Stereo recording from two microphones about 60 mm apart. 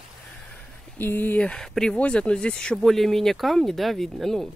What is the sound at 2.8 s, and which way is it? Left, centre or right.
Speech, centre.